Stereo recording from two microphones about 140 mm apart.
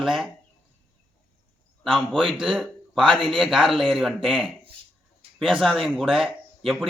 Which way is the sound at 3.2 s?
Centre (ahead or behind).